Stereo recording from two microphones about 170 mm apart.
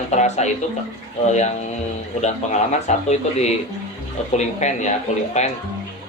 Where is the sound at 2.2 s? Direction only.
40° left (ahead or behind).